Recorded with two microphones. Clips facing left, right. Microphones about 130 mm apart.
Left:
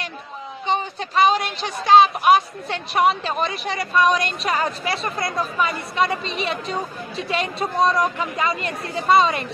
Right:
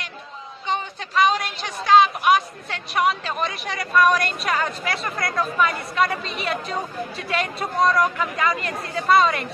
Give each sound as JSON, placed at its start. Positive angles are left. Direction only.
{"t": 0.7, "sound": "speech", "side_deg": 30}